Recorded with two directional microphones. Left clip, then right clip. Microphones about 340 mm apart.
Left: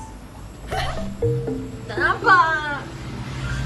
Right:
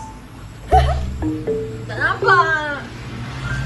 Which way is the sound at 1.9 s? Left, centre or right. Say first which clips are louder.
Right 1 dB; centre.